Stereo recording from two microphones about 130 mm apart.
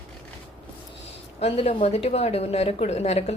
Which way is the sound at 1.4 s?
50° left (ahead or behind).